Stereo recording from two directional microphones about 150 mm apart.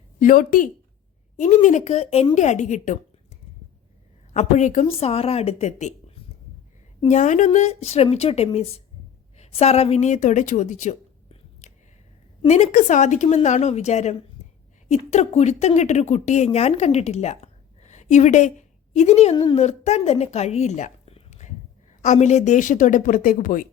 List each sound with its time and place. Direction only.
0.2 s a woman's voice: 65° left (ahead or behind)
1.4 s speech: 55° left (ahead or behind)
4.4 s a woman's voice: 50° left (ahead or behind)
14.4 s a sound: 50° left (ahead or behind)
14.8 s a woman's voice: 45° left (ahead or behind); by 23.6 s 65° left (ahead or behind)